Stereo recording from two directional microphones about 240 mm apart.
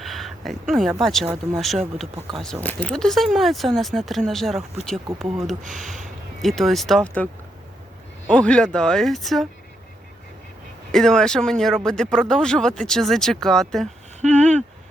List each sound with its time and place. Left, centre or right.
0.0 s a sound: centre
0.7 s speech: centre
2.6 s speech: centre
5.6 s speech: right
6.4 s speech: centre
8.3 s speech: centre
10.9 s speech: centre